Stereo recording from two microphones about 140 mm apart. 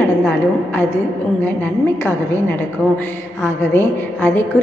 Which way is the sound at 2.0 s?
15° left (ahead or behind).